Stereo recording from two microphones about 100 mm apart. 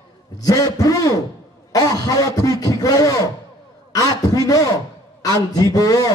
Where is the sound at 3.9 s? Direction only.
35° left (ahead or behind).